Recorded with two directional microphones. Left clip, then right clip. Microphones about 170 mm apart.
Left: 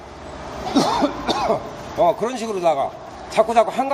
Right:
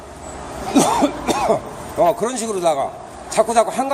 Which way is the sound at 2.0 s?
5° right (ahead or behind).